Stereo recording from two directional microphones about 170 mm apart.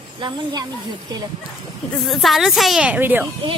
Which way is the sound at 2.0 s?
Centre (ahead or behind).